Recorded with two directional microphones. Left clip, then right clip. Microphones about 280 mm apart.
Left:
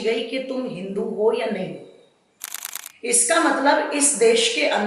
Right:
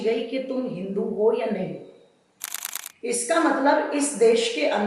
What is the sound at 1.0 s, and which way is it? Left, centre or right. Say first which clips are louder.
Speech: left 1 dB; right.